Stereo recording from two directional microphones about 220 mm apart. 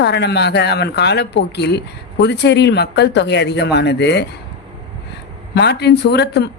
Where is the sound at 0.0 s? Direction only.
50° left (ahead or behind).